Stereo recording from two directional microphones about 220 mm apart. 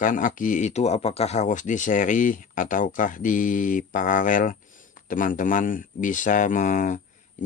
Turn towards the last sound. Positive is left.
turn(degrees=35)  # may be behind; listen again after turning